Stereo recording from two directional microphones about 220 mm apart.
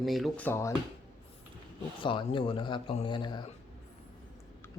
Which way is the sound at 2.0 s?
20° left (ahead or behind).